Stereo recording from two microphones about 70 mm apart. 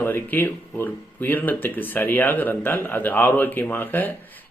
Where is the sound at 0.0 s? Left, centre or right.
Left.